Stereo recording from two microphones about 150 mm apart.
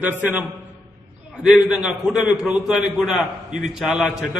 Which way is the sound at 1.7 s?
5° right (ahead or behind).